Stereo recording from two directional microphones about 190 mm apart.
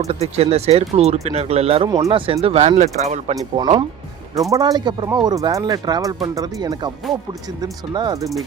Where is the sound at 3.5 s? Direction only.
25° right (ahead or behind).